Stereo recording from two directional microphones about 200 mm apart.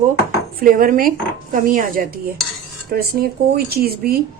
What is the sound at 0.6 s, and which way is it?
A woman's voice, 45° right (ahead or behind).